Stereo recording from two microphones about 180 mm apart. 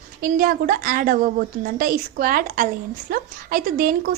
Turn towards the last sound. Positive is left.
turn(degrees=-55)  # may be behind; listen again after turning